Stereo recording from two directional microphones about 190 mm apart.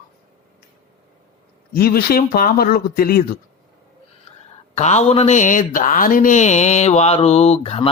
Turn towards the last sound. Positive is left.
turn(degrees=30)  # may be behind; listen again after turning